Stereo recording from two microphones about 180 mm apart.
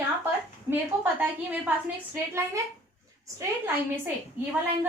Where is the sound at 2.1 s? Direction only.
15° right (ahead or behind).